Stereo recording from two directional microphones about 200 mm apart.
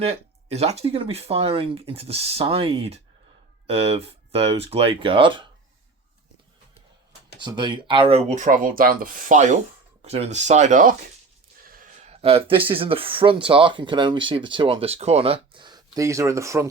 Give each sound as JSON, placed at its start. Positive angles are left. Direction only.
{"t": 0.0, "sound": "speech", "side_deg": -30}
{"t": 7.3, "sound": "speech", "side_deg": -20}